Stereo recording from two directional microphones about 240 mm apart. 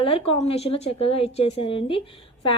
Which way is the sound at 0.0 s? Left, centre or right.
Left.